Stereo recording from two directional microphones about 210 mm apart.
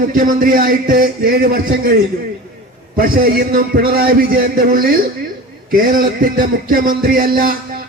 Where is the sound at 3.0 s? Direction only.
45° right (ahead or behind).